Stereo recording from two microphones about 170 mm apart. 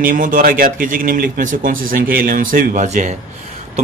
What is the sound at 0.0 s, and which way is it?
A man's voice, 55° right (ahead or behind).